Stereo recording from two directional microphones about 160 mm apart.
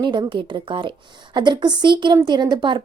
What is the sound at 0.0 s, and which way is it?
Speech, 30° right (ahead or behind).